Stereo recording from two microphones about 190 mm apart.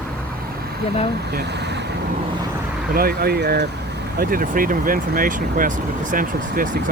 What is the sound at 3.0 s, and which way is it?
Speech, 55° right (ahead or behind).